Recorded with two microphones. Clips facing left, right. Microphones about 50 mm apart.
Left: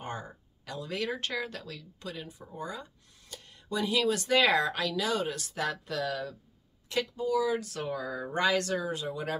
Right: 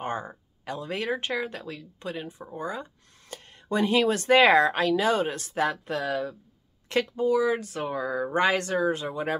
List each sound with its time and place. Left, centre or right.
0.0 s speech: right
6.9 s speech: right
7.2 s speech: right